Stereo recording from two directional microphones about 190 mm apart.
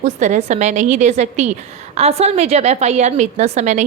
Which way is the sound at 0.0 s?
40° right (ahead or behind).